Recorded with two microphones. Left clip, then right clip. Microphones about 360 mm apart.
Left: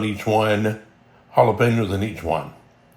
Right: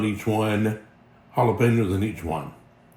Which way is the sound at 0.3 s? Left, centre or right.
Centre.